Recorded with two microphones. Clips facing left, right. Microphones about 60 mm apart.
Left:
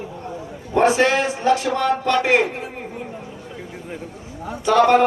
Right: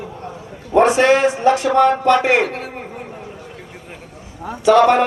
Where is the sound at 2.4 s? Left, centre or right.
Right.